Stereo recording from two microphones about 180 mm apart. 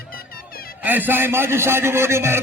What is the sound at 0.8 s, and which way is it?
Speech, 10° right (ahead or behind).